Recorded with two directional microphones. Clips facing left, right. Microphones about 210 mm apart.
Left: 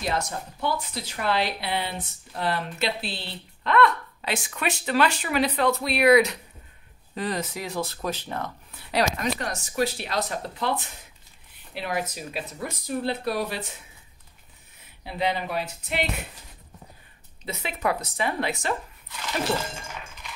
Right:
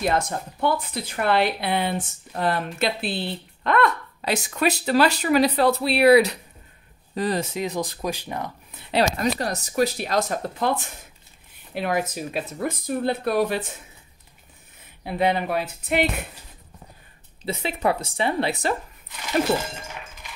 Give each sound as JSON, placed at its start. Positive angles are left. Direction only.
{"t": 0.0, "sound": "speech", "side_deg": -55}
{"t": 8.9, "sound": "speech", "side_deg": -35}
{"t": 15.0, "sound": "speech", "side_deg": -55}
{"t": 17.5, "sound": "a woman's voice", "side_deg": -30}